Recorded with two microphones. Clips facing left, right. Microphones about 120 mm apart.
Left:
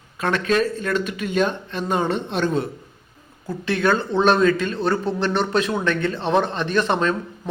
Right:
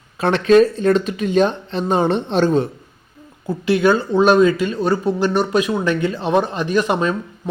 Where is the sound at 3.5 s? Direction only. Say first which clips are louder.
Right 5 dB; 10° right (ahead or behind).